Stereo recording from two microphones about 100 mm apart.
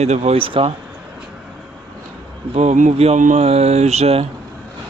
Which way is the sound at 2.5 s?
90° right.